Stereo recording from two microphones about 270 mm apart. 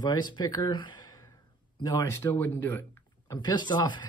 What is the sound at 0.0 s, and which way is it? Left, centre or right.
Speech, centre.